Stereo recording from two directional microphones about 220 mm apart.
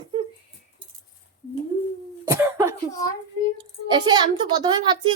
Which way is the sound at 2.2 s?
15° right (ahead or behind).